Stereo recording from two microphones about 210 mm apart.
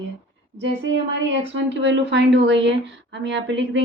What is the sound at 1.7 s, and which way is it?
A woman's voice, 60° right (ahead or behind).